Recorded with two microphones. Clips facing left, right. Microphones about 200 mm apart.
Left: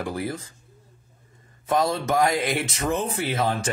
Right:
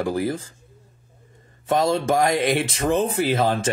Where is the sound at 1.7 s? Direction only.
25° right (ahead or behind).